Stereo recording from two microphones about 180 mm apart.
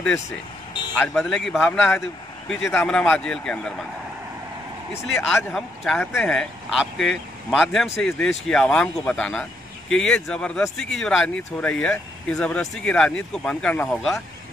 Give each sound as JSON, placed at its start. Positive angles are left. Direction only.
{"t": 0.9, "sound": "speech", "side_deg": 10}
{"t": 5.1, "sound": "speech", "side_deg": 0}